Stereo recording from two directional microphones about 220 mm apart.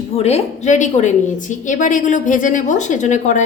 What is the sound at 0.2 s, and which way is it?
A woman's voice, 30° left (ahead or behind).